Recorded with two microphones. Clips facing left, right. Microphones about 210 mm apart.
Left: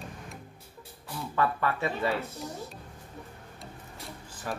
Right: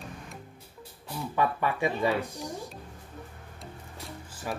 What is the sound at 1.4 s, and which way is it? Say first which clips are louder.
Speech: right 1 dB; 15° right (ahead or behind).